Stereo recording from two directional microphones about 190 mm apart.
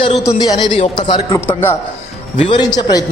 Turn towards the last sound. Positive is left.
turn(degrees=20)  # may be behind; listen again after turning